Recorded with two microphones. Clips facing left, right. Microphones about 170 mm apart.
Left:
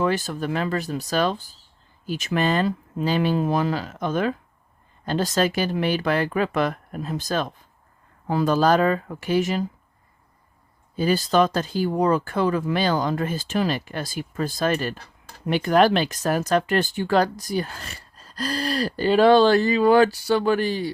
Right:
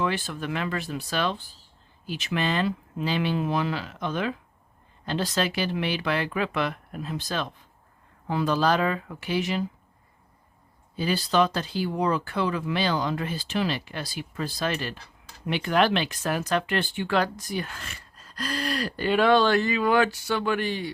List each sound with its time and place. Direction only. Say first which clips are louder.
0.0 s speech: left 5 dB; 40° left (ahead or behind)
10.9 s speech: left 4 dB; 45° left (ahead or behind)
15.4 s speech: left 5 dB; 40° left (ahead or behind)